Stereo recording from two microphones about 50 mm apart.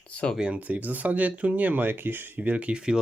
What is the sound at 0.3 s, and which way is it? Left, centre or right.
Speech, right.